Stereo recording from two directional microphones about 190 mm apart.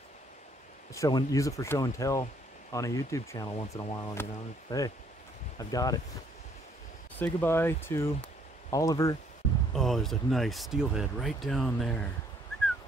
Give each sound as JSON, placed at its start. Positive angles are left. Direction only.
{"t": 0.9, "sound": "speech", "side_deg": 15}
{"t": 7.2, "sound": "speech", "side_deg": 10}
{"t": 9.8, "sound": "speech", "side_deg": 0}